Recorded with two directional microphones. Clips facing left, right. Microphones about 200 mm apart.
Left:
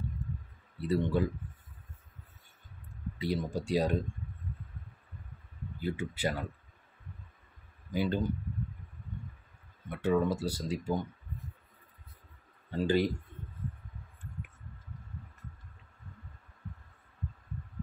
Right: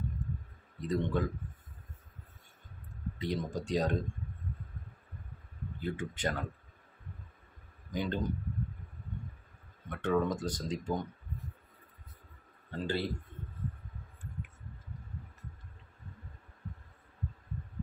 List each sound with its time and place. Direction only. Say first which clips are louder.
0.7 s speech: left 2 dB; 10° left (ahead or behind)
3.2 s speech: left 2 dB; 10° left (ahead or behind)
5.8 s speech: left 2 dB; 10° left (ahead or behind)
7.9 s speech: left 3 dB; 10° left (ahead or behind)
9.8 s speech: left 2 dB; 5° left (ahead or behind)
12.8 s speech: left 6 dB; 15° left (ahead or behind)